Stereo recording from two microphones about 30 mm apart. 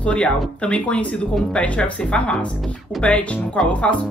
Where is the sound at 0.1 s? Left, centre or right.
Left.